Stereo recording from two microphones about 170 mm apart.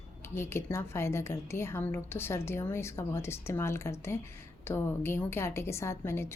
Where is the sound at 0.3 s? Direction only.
15° left (ahead or behind).